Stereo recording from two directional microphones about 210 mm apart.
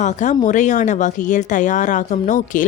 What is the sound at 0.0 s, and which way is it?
Speech, 35° left (ahead or behind).